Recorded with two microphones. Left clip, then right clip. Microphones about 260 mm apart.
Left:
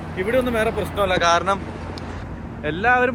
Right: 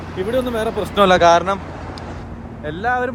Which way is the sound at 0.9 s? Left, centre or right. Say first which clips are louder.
Right 8 dB; right.